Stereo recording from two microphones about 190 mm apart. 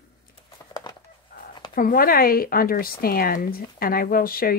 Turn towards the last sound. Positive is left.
turn(degrees=50)  # may be behind; listen again after turning